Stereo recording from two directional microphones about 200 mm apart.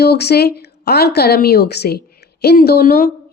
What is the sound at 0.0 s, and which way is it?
A woman's voice, 55° left (ahead or behind).